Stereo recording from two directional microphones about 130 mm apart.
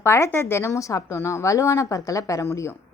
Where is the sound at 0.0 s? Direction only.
20° left (ahead or behind).